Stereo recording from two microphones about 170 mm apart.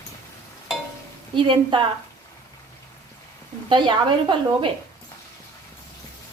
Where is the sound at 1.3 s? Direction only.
30° right (ahead or behind).